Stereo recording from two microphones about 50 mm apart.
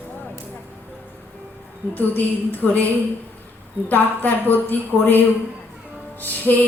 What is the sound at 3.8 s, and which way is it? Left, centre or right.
A woman's voice, left.